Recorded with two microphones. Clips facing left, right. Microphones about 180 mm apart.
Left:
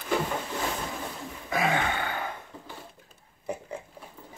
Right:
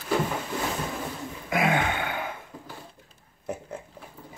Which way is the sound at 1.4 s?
15° right (ahead or behind).